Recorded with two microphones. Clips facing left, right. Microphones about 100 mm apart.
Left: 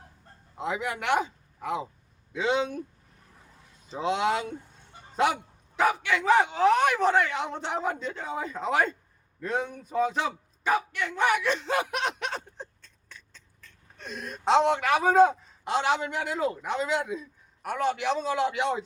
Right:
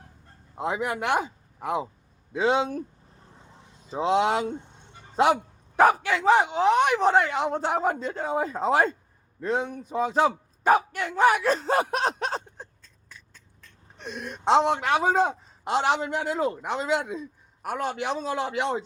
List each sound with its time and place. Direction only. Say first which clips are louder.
0.5 s speech: right 3 dB; 35° right (ahead or behind)
2.3 s a sound: right 3 dB; 40° right (ahead or behind)
3.9 s speech: right 4 dB; 30° right (ahead or behind)
5.7 s speech: right 5 dB; 45° right (ahead or behind); by 7.1 s 20° right (ahead or behind)
7.1 s speech: right 3 dB; 30° right (ahead or behind)
13.1 s a sound: even; 15° right (ahead or behind)
15.1 s speech: left 4 dB; 30° right (ahead or behind)